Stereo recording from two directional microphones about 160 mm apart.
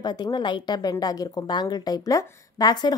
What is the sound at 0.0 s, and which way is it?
Speech, 25° left (ahead or behind).